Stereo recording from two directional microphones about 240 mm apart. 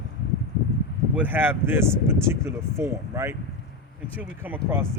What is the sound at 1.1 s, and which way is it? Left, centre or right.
Speech, centre.